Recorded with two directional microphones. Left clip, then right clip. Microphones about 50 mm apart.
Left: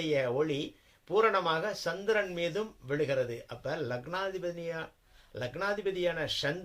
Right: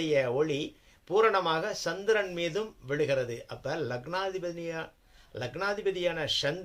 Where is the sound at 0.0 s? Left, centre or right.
Right.